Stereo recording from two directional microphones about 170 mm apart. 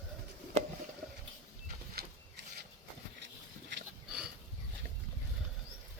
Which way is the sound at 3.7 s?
90° right.